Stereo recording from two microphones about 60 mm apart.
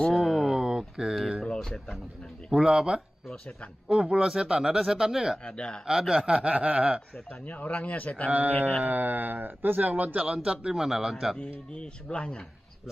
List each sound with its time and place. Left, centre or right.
0.1 s a sound: centre
1.4 s speech: centre
2.5 s speech: centre
5.5 s speech: centre
5.9 s speech: centre
6.2 s speech: centre
7.4 s speech: left
8.3 s speech: right
8.5 s speech: left
8.8 s speech: right; by 11.3 s centre
11.3 s speech: centre